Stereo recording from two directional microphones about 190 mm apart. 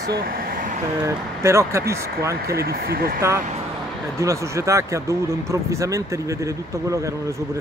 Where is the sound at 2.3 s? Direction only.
55° right (ahead or behind).